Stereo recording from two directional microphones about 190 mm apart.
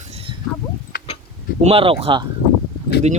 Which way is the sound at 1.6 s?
30° right (ahead or behind).